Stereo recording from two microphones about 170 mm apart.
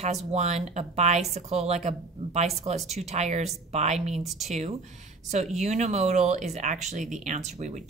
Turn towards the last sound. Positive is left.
turn(degrees=-45)  # may be behind; listen again after turning